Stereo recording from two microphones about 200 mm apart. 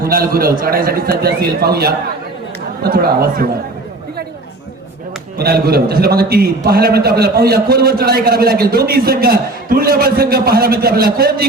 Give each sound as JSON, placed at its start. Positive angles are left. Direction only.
{"t": 0.0, "sound": "a man's voice", "side_deg": -45}
{"t": 5.4, "sound": "a man's voice", "side_deg": -50}